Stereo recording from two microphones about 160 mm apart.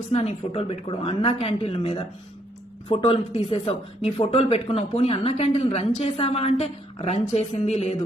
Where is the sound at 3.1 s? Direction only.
40° left (ahead or behind).